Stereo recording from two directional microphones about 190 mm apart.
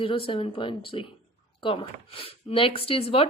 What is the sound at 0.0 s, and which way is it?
Speech, 30° left (ahead or behind).